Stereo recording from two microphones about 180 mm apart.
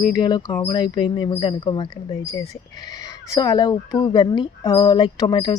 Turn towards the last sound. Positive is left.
turn(degrees=25)  # may be behind; listen again after turning